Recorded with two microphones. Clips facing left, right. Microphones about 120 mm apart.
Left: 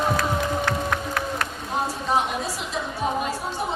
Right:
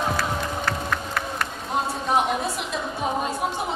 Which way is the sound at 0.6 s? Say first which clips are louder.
Left 2 dB; centre (ahead or behind).